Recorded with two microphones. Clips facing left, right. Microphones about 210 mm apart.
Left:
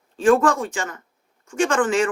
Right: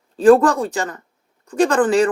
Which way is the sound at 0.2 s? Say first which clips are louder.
Right 5 dB; 35° right (ahead or behind).